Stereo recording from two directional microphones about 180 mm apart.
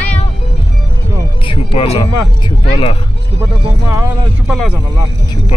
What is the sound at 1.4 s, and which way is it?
Music, 30° left (ahead or behind).